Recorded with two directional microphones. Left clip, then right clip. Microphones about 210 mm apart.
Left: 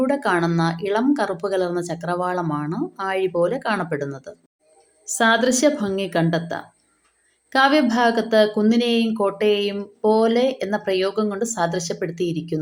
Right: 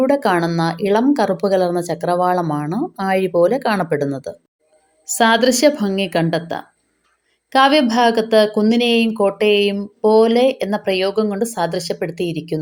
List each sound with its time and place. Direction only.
0.0 s speech: 25° right (ahead or behind)